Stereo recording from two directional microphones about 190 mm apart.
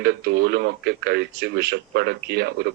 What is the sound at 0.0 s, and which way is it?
Speech, 60° right (ahead or behind).